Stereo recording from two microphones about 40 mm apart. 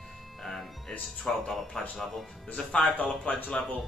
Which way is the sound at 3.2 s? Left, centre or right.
Left.